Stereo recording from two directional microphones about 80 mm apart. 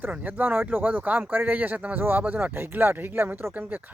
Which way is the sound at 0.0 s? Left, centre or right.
Right.